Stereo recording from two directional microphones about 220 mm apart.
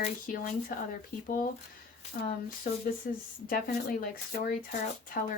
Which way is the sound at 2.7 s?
40° left (ahead or behind).